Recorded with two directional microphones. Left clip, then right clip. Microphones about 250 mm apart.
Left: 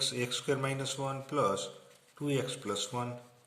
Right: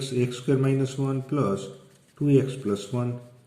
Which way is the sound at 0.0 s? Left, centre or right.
Left.